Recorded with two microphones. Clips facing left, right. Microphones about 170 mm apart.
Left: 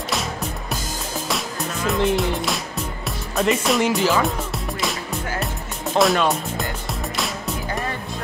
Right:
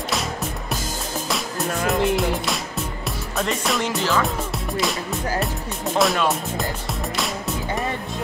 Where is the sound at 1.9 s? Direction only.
Centre (ahead or behind).